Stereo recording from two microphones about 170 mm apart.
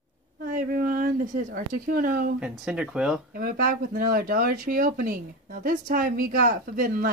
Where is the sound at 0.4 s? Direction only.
55° right (ahead or behind).